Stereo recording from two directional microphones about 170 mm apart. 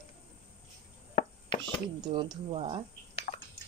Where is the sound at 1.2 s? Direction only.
45° left (ahead or behind).